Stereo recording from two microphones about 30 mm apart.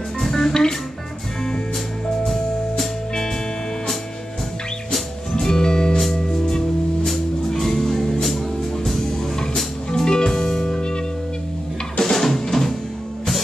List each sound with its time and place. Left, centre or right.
0.4 s music: centre
5.3 s music: left
7.1 s music: centre
9.8 s music: left
12.0 s music: centre